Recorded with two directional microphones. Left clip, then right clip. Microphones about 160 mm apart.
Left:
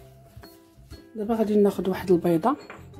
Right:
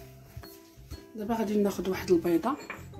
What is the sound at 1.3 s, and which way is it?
Speech, 80° left.